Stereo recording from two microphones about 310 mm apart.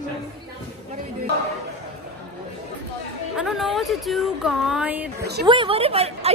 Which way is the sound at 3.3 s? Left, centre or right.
Centre.